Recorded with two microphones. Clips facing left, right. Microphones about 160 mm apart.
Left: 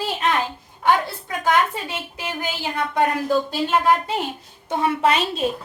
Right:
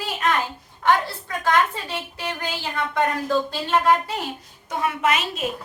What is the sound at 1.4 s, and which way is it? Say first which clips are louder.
Speech: left 1 dB; 10° left (ahead or behind).